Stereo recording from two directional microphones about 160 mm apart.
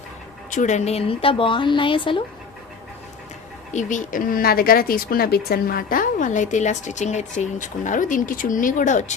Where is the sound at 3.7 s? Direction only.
55° left (ahead or behind).